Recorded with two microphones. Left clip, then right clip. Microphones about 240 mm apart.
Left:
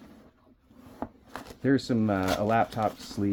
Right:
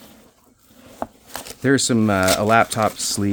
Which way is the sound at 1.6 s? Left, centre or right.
Right.